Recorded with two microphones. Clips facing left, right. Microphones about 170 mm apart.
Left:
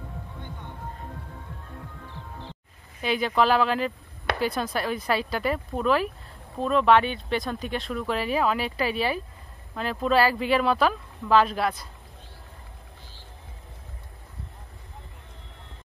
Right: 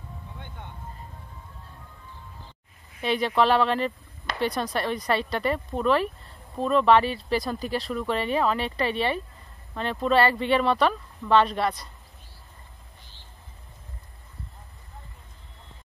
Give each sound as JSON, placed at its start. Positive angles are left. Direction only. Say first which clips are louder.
{"t": 2.0, "sound": "music", "louder": "left 6 dB", "side_deg": 80}
{"t": 3.0, "sound": "speech", "louder": "right 1 dB", "side_deg": 0}